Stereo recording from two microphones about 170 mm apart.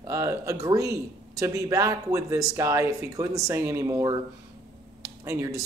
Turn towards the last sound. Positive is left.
turn(degrees=-20)  # may be behind; listen again after turning